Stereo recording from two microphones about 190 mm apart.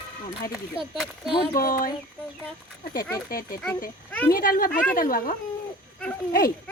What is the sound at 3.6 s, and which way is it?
Speech, 10° left (ahead or behind).